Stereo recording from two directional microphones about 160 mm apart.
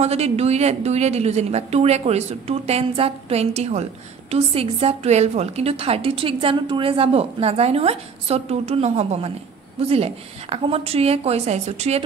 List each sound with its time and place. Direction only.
0.0 s a woman's voice: 40° right (ahead or behind)